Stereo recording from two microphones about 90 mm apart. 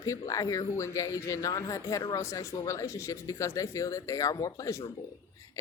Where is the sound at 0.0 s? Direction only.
40° left (ahead or behind).